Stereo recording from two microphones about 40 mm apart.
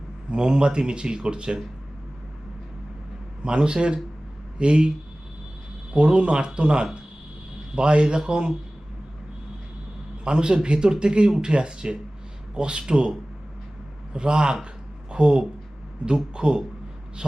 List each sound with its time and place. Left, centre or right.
0.3 s speech: right
3.4 s speech: right
5.9 s speech: right
10.2 s speech: right